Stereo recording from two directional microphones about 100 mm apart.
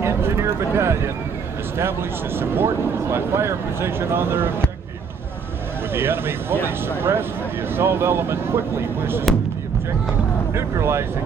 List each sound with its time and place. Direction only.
0.0 s a sound: 25° right (ahead or behind)
1.8 s speech: 25° right (ahead or behind)
5.9 s speech: 25° right (ahead or behind)
10.5 s speech: 25° right (ahead or behind)